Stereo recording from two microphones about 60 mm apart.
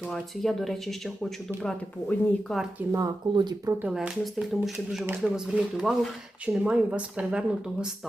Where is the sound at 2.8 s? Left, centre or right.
Right.